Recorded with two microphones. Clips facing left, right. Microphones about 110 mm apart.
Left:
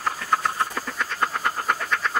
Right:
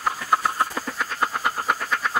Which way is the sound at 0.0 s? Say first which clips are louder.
Right 1 dB; 5° right (ahead or behind).